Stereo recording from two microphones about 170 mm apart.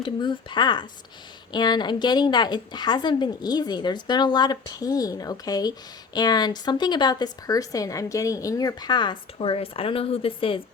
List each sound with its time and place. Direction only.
0.0 s a woman's voice: 25° left (ahead or behind)